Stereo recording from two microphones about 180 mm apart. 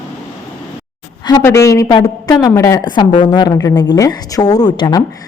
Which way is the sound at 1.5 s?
15° left (ahead or behind).